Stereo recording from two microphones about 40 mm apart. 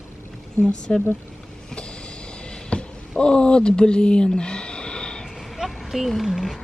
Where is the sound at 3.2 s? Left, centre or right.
Left.